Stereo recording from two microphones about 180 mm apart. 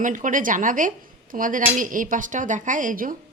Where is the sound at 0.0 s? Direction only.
45° right (ahead or behind).